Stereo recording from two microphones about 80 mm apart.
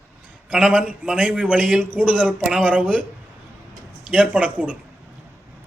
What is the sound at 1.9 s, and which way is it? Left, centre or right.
Speech, centre.